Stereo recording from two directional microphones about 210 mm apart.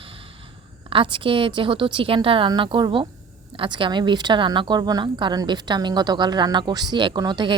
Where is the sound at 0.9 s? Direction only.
25° right (ahead or behind).